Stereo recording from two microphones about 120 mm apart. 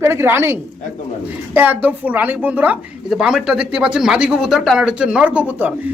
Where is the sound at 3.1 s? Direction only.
5° right (ahead or behind).